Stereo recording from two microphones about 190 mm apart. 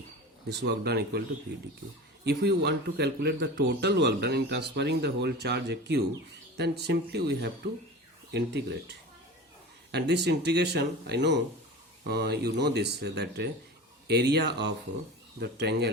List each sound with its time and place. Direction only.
0.4 s a man's voice: 60° right (ahead or behind)